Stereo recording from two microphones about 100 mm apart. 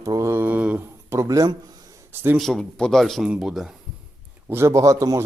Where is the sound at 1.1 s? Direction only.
30° right (ahead or behind).